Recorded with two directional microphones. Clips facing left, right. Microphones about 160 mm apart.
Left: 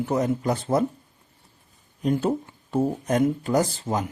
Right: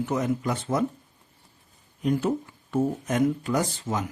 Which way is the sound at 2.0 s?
30° left (ahead or behind).